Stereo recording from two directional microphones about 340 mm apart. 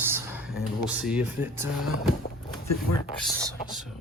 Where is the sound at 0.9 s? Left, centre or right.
Centre.